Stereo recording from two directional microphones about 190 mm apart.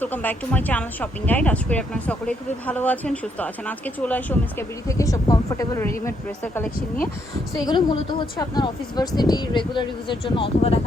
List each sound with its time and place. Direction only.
0.0 s speech: 10° left (ahead or behind)
7.6 s speech: 20° left (ahead or behind)